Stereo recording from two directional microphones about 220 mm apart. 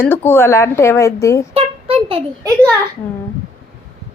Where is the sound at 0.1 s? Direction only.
10° left (ahead or behind).